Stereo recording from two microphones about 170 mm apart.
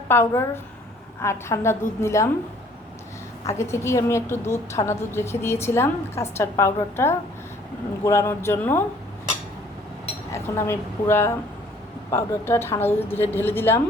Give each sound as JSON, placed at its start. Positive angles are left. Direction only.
{"t": 0.1, "sound": "a woman's voice", "side_deg": 15}
{"t": 3.4, "sound": "a woman's voice", "side_deg": 15}
{"t": 10.3, "sound": "a woman's voice", "side_deg": 15}